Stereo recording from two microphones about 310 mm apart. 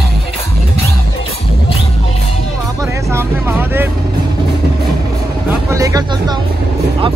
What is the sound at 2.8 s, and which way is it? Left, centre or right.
Vehicle, centre.